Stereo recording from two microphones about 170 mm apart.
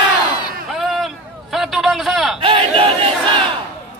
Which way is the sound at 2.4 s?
30° right (ahead or behind).